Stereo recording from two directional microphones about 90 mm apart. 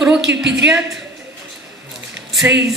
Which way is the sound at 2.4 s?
25° right (ahead or behind).